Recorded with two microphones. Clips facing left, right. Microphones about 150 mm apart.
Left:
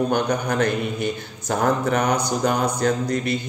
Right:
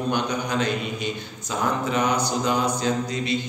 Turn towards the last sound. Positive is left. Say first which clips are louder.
# left 3 dB
turn(degrees=55)  # may be behind; listen again after turning